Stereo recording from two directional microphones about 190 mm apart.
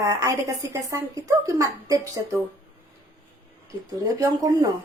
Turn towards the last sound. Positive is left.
turn(degrees=-20)  # may be behind; listen again after turning